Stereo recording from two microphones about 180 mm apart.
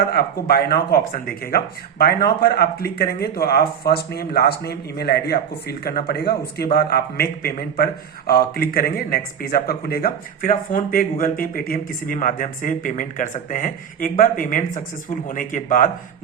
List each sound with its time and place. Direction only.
0.1 s speech: 60° left (ahead or behind)